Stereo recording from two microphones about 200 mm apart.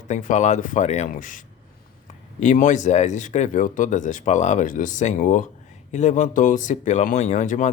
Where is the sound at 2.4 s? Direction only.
40° left (ahead or behind).